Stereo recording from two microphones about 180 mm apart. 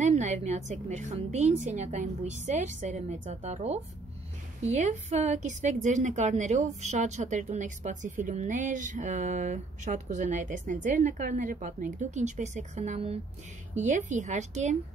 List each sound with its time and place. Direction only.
0.0 s a woman's voice: 40° right (ahead or behind)